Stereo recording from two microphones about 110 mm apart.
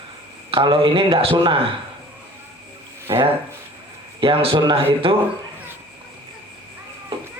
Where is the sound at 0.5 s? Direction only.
50° right (ahead or behind).